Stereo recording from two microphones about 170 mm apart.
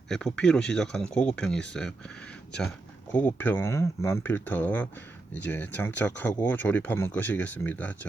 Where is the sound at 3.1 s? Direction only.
10° left (ahead or behind).